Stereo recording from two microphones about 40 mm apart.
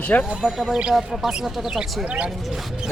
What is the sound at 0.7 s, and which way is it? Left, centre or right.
Speech, right.